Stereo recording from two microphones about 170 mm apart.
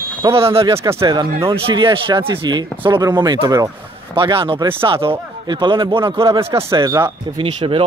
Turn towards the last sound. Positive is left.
turn(degrees=-30)  # may be behind; listen again after turning